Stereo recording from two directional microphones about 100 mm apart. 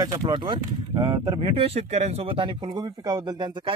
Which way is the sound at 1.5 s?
80° right.